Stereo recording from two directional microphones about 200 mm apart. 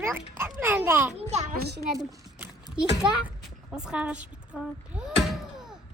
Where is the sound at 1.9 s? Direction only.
15° right (ahead or behind).